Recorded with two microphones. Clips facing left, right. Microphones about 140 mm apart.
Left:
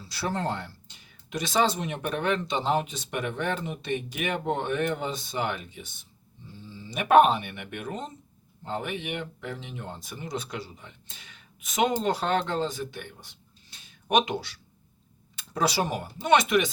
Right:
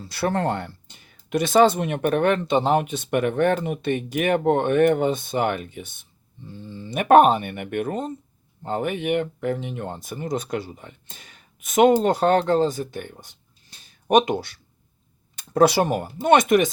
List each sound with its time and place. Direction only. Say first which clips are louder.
0.0 s speech: right 7 dB; 55° right (ahead or behind)